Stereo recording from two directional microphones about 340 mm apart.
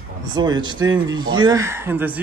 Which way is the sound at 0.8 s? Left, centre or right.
Right.